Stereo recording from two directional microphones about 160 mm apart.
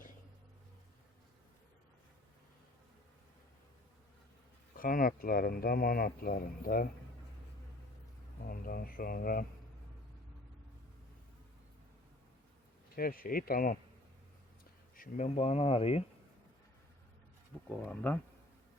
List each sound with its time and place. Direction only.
4.8 s speech: 60° left (ahead or behind)
8.4 s speech: 65° left (ahead or behind)
13.0 s speech: 65° left (ahead or behind)
14.9 s speech: 60° left (ahead or behind)
15.4 s speech: 40° left (ahead or behind)
17.7 s speech: 10° left (ahead or behind)